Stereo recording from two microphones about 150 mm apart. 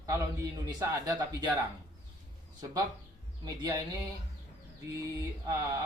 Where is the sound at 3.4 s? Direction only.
25° right (ahead or behind).